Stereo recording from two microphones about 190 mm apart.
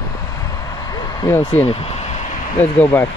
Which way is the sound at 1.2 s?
15° left (ahead or behind).